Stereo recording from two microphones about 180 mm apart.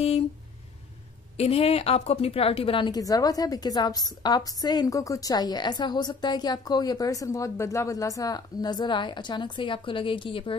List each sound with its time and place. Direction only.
1.3 s a woman's voice: 35° left (ahead or behind)